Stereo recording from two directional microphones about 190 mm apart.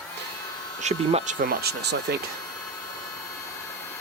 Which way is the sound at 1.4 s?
55° right (ahead or behind).